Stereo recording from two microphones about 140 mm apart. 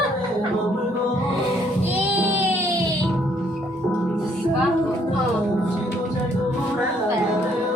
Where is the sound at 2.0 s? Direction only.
10° right (ahead or behind).